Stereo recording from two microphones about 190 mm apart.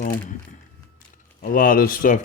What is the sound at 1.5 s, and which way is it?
Speech, 50° left (ahead or behind).